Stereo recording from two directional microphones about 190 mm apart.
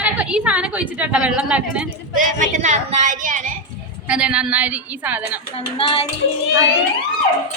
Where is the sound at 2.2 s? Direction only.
40° right (ahead or behind).